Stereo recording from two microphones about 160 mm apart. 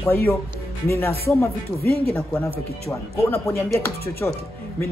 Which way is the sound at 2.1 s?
5° left (ahead or behind).